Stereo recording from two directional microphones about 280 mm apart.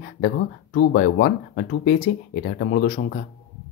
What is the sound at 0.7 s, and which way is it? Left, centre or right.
Speech, left.